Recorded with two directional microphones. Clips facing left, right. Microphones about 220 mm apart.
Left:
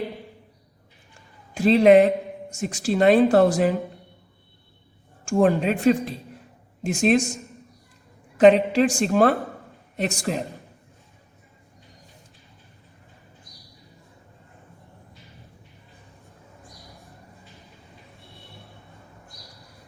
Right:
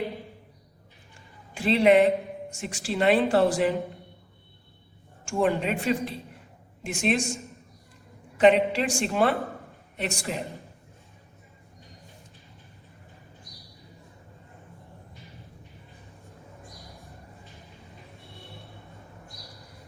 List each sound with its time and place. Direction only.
1.5 s speech: 40° left (ahead or behind)
5.2 s speech: 40° left (ahead or behind)
8.4 s speech: 40° left (ahead or behind)